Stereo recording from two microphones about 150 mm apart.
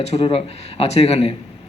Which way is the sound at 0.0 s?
45° left (ahead or behind).